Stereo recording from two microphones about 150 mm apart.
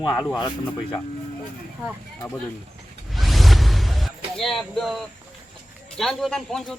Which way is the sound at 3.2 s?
Centre (ahead or behind).